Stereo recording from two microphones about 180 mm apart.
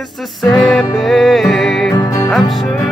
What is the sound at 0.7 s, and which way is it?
Music, centre (ahead or behind).